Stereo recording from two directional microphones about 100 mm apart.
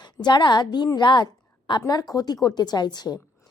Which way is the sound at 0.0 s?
45° left (ahead or behind).